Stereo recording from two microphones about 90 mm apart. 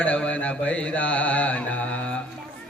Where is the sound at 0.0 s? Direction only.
15° left (ahead or behind).